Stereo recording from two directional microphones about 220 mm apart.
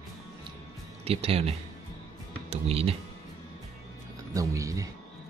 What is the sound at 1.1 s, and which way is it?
Speech, 25° right (ahead or behind).